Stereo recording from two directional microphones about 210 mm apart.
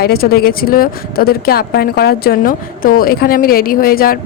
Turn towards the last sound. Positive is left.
turn(degrees=45)  # may be behind; listen again after turning